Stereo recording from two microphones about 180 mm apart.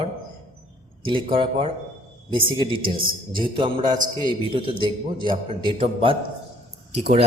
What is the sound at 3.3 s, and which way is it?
A man's voice, 25° right (ahead or behind).